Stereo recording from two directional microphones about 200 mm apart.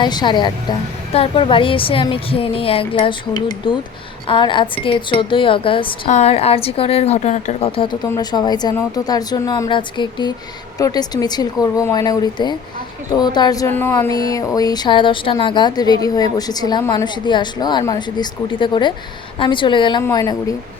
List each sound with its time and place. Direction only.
0.0 s a woman's voice: 20° left (ahead or behind)